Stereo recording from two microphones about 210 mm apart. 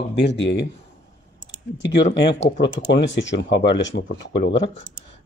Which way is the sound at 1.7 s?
60° left (ahead or behind).